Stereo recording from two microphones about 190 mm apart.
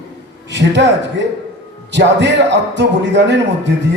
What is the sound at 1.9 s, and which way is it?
A man's voice, 65° right (ahead or behind).